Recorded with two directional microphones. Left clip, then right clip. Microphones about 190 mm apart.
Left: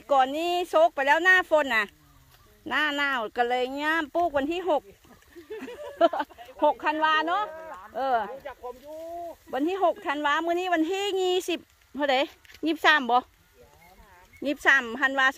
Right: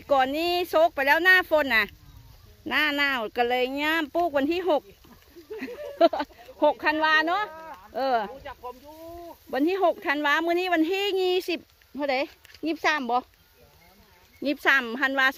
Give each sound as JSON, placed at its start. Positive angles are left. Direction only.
{"t": 0.0, "sound": "speech", "side_deg": -15}
{"t": 9.5, "sound": "speech", "side_deg": -20}
{"t": 14.4, "sound": "speech", "side_deg": -15}